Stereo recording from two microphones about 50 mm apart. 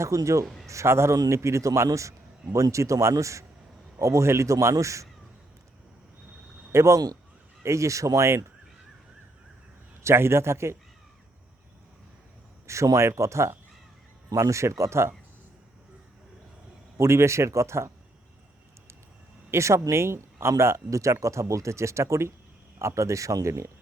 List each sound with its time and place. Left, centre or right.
0.0 s a man's voice: right
0.7 s a man's voice: right
6.7 s a man's voice: right
10.0 s a man's voice: right
12.6 s speech: right
14.3 s speech: right
17.0 s speech: right
19.5 s speech: right